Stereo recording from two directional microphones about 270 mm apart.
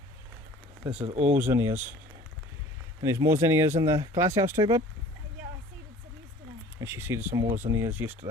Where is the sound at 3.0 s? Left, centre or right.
Centre.